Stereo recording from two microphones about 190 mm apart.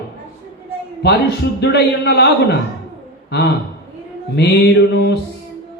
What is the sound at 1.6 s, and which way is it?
A man's voice, 60° left (ahead or behind).